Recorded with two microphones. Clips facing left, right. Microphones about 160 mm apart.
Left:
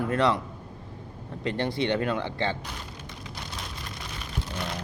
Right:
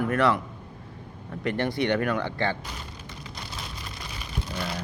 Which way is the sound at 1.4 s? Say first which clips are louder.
Right 1 dB; 20° left (ahead or behind).